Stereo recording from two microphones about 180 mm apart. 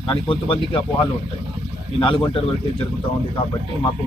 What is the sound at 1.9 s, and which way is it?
Speech, 30° left (ahead or behind).